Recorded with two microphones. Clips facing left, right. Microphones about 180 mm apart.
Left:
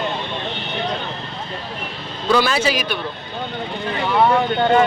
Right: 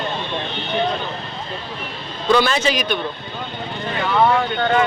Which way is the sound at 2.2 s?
5° left (ahead or behind).